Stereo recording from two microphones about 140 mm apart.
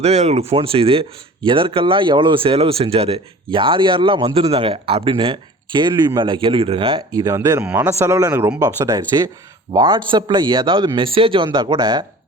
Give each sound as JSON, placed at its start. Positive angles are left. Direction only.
{"t": 0.0, "sound": "speech", "side_deg": -50}